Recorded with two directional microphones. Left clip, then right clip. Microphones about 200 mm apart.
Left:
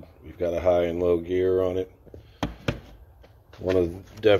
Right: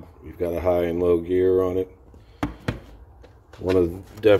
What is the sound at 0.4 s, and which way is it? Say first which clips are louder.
Speech: even; 5° left (ahead or behind).